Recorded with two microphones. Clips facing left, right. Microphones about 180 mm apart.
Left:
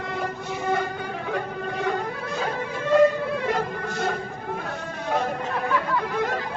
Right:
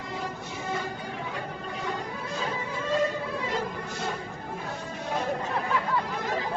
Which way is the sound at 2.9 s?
60° left (ahead or behind).